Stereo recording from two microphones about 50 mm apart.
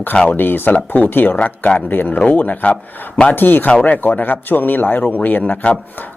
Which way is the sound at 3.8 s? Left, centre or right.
Left.